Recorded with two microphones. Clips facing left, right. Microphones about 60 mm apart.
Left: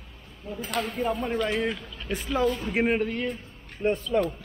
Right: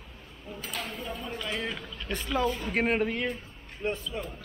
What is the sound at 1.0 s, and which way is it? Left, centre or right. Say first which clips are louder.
Speech: left 10 dB; left.